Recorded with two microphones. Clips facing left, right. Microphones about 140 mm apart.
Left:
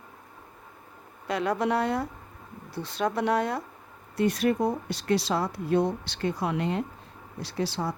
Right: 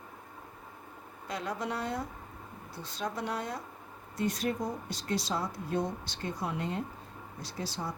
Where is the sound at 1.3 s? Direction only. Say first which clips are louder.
Left 9 dB; 70° left (ahead or behind).